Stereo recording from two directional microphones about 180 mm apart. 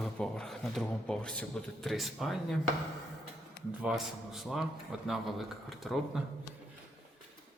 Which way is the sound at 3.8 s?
5° right (ahead or behind).